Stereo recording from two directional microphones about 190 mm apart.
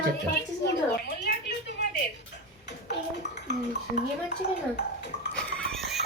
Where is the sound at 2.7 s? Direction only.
65° left (ahead or behind).